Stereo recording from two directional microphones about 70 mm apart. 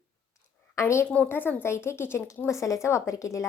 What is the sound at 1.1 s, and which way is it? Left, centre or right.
A woman's voice, left.